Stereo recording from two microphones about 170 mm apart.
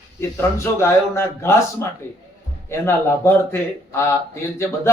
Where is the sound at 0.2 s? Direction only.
15° left (ahead or behind).